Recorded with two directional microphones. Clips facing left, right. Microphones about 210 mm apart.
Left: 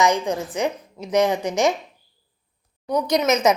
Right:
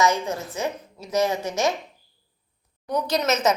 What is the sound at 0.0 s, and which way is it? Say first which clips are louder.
A woman's voice: left 2 dB; 15° left (ahead or behind).